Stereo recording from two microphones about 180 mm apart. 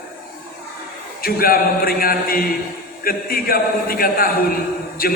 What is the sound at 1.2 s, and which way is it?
A man's voice, 55° left (ahead or behind).